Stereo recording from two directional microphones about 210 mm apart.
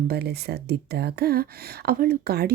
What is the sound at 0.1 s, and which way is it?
A woman's voice, 50° right (ahead or behind).